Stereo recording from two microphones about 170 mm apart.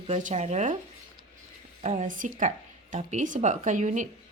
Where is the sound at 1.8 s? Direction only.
45° right (ahead or behind).